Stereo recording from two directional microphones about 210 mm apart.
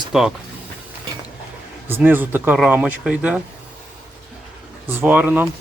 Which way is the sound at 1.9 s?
10° right (ahead or behind).